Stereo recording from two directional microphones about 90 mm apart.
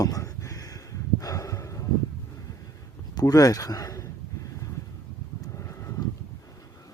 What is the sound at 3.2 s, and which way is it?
Speech, 45° left (ahead or behind).